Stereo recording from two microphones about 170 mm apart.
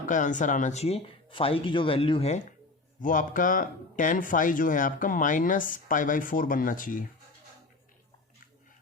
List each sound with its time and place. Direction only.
0.0 s speech: 50° left (ahead or behind)
3.0 s speech: 50° left (ahead or behind)